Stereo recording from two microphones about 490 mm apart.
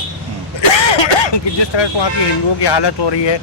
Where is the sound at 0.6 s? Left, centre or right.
Left.